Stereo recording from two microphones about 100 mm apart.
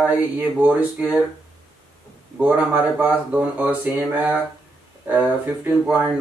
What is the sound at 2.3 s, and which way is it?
Speech, 15° right (ahead or behind).